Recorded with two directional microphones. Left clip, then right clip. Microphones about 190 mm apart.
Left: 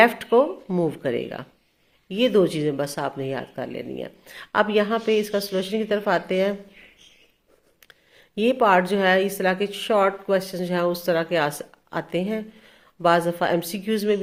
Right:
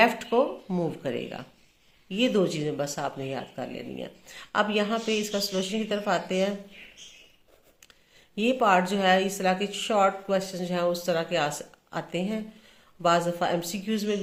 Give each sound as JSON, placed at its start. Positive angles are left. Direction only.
{"t": 0.0, "sound": "a woman's voice", "side_deg": 40}
{"t": 8.4, "sound": "a woman's voice", "side_deg": 40}